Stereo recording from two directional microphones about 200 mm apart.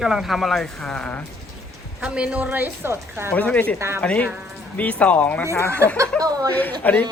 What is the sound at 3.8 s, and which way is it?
Speech, 15° right (ahead or behind).